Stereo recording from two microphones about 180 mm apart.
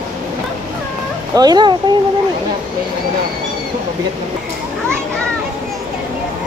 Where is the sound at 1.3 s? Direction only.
20° right (ahead or behind).